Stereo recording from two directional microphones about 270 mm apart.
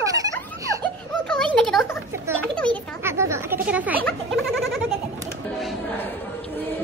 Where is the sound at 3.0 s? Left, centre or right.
Centre.